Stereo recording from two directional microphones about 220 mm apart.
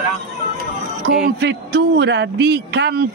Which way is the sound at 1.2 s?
50° right (ahead or behind).